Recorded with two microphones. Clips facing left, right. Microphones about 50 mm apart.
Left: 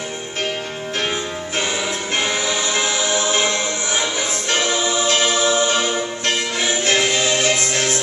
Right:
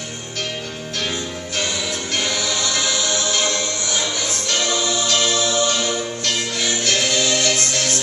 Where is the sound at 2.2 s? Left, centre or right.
Left.